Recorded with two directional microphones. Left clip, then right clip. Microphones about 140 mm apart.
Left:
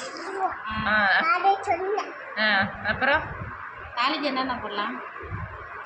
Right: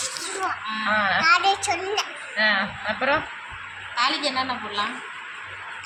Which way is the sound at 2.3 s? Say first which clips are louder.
Right 1 dB; 40° right (ahead or behind).